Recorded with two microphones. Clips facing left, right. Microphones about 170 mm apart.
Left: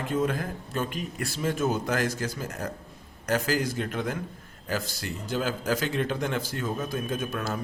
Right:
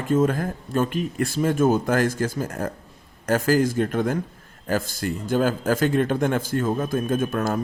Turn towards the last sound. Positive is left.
turn(degrees=-50)  # may be behind; listen again after turning